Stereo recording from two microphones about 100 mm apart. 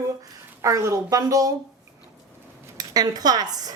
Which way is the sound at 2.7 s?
40° right (ahead or behind).